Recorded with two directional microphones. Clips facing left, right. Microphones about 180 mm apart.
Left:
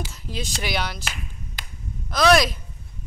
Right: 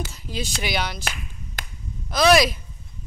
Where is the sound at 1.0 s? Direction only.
50° right (ahead or behind).